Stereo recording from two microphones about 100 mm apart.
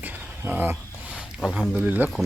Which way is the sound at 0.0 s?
15° right (ahead or behind).